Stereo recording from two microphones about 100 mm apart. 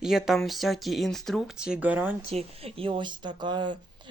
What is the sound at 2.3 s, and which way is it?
Speech, 80° right.